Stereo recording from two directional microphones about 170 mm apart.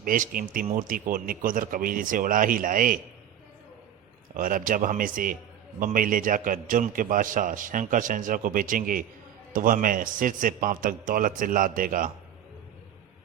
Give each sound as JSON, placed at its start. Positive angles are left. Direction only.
{"t": 0.0, "sound": "a man's voice", "side_deg": -55}
{"t": 4.4, "sound": "a man's voice", "side_deg": -55}